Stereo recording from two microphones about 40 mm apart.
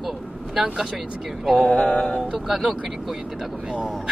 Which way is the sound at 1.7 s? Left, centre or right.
Left.